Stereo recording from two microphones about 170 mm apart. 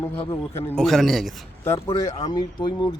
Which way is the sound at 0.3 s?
15° left (ahead or behind).